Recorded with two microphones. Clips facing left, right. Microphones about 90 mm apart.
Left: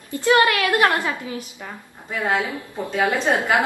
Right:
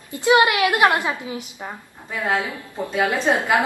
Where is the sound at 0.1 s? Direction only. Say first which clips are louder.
Right 1 dB; 20° right (ahead or behind).